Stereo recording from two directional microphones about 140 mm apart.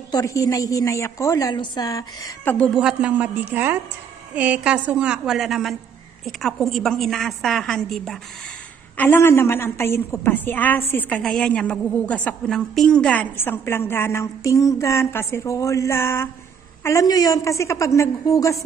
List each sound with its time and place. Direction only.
0.1 s a woman's voice: 25° left (ahead or behind)
2.4 s a woman's voice: 10° left (ahead or behind)
2.7 s a woman's voice: 5° right (ahead or behind)
8.9 s a woman's voice: 15° left (ahead or behind)